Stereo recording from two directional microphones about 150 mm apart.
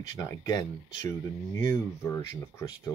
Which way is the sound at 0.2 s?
20° left (ahead or behind).